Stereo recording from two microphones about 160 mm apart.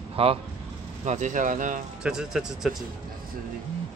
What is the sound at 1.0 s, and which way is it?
Speech, 50° right (ahead or behind).